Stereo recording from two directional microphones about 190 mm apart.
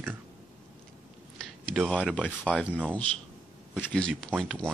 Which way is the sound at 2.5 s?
10° left (ahead or behind).